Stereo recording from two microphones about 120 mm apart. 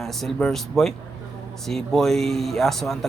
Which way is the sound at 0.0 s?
Centre (ahead or behind).